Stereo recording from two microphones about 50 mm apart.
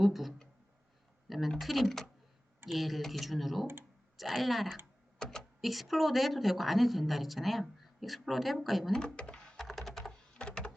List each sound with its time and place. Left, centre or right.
0.0 s speech: centre
5.2 s speech: centre
5.5 s speech: centre
8.9 s speech: centre
9.6 s computer keyboard: centre
10.3 s a sound: left